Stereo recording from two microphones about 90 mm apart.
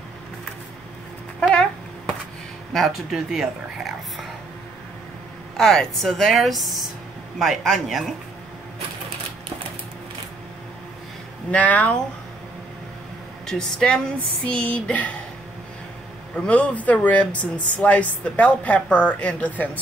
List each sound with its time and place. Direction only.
2.7 s speech: centre (ahead or behind)
5.6 s a woman's voice: 5° left (ahead or behind)
11.5 s speech: 15° left (ahead or behind)
13.5 s speech: 5° left (ahead or behind)
16.3 s speech: 15° left (ahead or behind)